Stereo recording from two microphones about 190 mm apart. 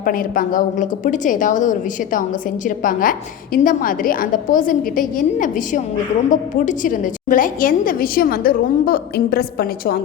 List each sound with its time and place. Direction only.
0.0 s a woman's voice: 45° left (ahead or behind)